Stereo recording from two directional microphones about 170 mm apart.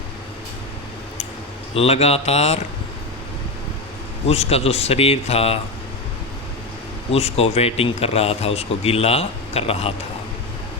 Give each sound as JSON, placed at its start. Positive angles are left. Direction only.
{"t": 1.7, "sound": "speech", "side_deg": 35}
{"t": 4.3, "sound": "speech", "side_deg": 35}
{"t": 7.1, "sound": "speech", "side_deg": 35}